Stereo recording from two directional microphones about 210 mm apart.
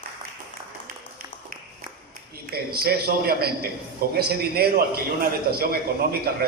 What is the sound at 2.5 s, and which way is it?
A man's voice, 50° right (ahead or behind).